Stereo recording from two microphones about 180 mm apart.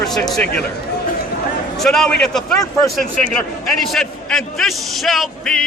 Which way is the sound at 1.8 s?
5° left (ahead or behind).